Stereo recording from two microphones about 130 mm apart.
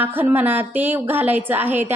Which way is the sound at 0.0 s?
15° right (ahead or behind).